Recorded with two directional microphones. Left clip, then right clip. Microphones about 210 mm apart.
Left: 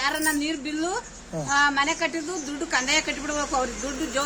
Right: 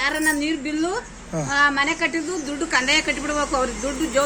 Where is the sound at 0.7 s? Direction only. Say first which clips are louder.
Right 4 dB; 35° left (ahead or behind).